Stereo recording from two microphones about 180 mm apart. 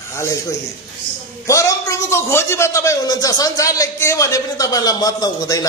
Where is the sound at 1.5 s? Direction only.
15° left (ahead or behind).